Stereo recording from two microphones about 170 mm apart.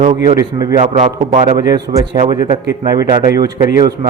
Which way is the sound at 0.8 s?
45° right (ahead or behind).